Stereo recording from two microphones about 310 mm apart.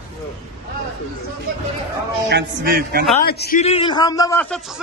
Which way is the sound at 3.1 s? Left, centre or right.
Left.